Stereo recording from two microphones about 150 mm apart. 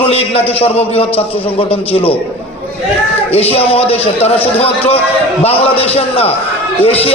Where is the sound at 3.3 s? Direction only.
40° left (ahead or behind).